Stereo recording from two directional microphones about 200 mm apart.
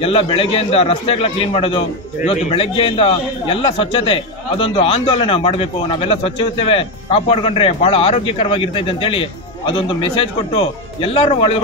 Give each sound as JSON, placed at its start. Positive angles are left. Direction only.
{"t": 0.0, "sound": "a man's voice", "side_deg": 30}